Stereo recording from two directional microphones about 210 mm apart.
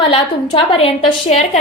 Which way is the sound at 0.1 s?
25° left (ahead or behind).